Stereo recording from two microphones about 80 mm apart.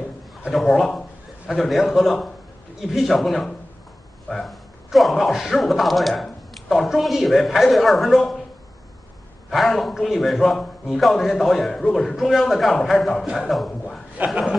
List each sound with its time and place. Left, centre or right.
0.5 s speech: centre
9.5 s speech: centre
13.7 s a sound: centre
14.1 s speech: centre